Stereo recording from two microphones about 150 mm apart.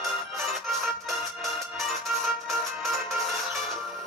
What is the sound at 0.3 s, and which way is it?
Music, centre (ahead or behind).